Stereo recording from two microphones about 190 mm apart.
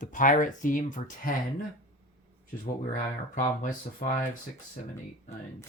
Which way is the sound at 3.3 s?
45° left (ahead or behind).